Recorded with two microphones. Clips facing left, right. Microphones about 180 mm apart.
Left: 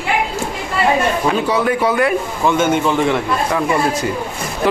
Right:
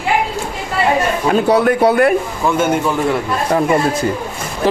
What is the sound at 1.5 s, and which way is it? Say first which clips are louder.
Speech: right 4 dB; 65° right (ahead or behind).